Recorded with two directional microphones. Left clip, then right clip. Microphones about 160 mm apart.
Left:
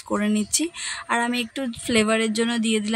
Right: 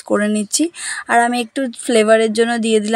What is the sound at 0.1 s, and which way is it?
Speech, 40° right (ahead or behind).